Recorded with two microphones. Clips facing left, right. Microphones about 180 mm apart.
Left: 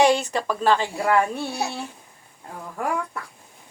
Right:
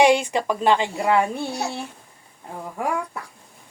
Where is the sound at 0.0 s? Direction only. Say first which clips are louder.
Right 2 dB; 15° right (ahead or behind).